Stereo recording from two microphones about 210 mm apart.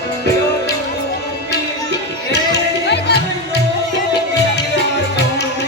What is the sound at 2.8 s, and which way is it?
Music, 55° left (ahead or behind).